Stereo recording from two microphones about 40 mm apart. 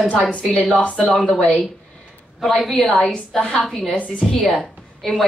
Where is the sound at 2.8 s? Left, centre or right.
Left.